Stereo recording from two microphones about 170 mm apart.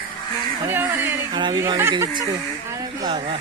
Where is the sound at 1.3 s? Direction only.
25° right (ahead or behind).